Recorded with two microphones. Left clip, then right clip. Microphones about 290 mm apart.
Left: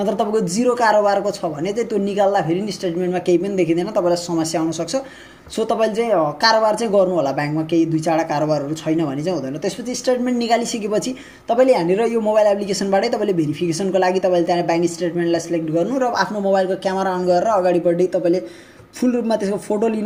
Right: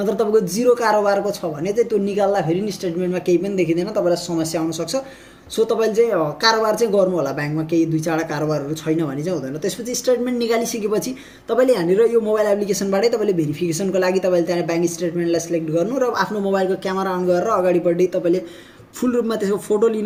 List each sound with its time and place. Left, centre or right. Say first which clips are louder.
0.3 s speech: right 4 dB; centre
5.5 s speech: right 2 dB; centre
10.3 s speech: left 2 dB; right
11.8 s speech: right 2 dB; right
12.3 s speech: left 2 dB; centre